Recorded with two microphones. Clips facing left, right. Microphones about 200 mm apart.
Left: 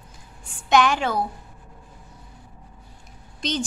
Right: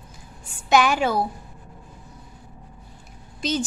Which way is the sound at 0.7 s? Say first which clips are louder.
Right 1 dB; 5° right (ahead or behind).